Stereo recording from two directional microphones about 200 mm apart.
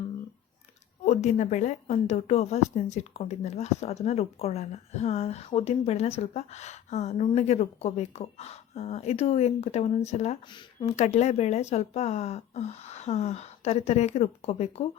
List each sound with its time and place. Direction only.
1.0 s a woman's voice: 35° left (ahead or behind)